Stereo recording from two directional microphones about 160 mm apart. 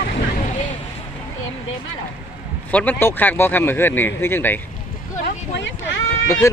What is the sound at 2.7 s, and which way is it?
Speech, 10° left (ahead or behind).